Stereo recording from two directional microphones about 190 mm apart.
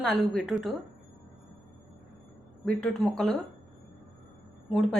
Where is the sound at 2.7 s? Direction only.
5° left (ahead or behind).